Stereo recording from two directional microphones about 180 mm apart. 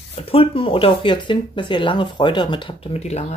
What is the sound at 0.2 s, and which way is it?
Speech, 30° left (ahead or behind).